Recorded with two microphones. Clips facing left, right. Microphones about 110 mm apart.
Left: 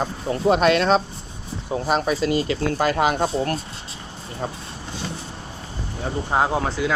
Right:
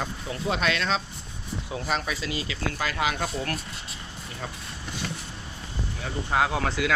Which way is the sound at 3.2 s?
30° left (ahead or behind).